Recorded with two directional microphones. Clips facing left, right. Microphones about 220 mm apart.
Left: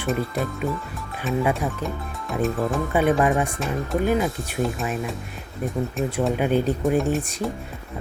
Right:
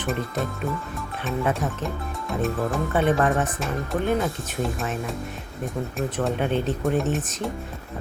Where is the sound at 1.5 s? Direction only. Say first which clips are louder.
Left 1 dB; centre (ahead or behind).